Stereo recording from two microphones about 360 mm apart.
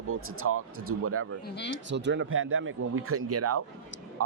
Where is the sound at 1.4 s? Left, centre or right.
Left.